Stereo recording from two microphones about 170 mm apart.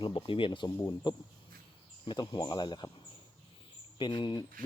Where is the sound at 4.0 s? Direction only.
25° left (ahead or behind).